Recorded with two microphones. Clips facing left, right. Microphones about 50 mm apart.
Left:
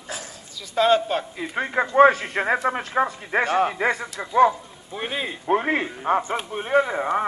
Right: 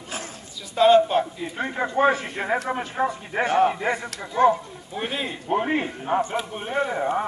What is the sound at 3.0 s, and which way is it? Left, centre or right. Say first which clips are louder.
Speech: left 2 dB; left.